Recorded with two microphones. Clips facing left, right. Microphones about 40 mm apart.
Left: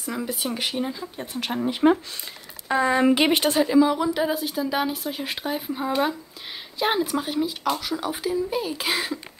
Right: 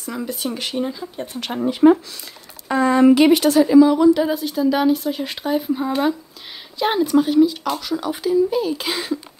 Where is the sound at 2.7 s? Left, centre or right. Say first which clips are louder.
Right 6 dB; centre.